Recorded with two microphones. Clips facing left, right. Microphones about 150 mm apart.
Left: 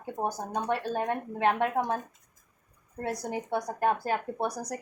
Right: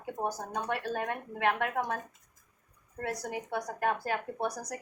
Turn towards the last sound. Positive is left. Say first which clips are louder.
# left 3 dB
turn(degrees=30)  # may be behind; listen again after turning